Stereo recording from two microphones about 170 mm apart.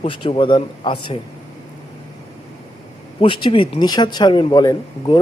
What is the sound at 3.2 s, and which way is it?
Speech, 30° left (ahead or behind).